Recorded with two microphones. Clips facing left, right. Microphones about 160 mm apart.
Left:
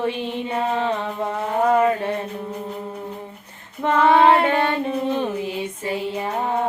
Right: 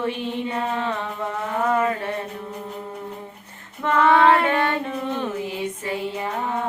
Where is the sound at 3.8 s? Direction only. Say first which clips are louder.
Left 2 dB; 25° left (ahead or behind).